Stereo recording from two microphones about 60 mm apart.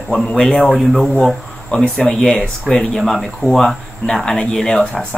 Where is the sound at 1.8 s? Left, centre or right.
Centre.